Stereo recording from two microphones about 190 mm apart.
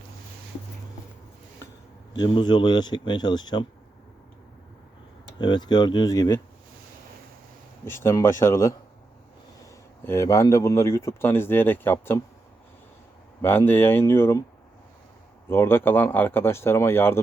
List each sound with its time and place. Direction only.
2.1 s speech: 25° left (ahead or behind)
5.4 s speech: 25° left (ahead or behind)
7.9 s speech: 15° left (ahead or behind)
10.0 s speech: 15° left (ahead or behind)
13.4 s speech: 10° left (ahead or behind)
15.4 s speech: 10° left (ahead or behind)